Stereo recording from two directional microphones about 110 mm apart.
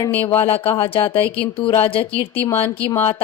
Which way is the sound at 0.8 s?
50° left (ahead or behind).